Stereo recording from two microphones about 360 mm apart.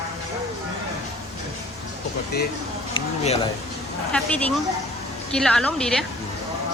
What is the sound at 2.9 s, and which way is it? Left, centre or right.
Speech, centre.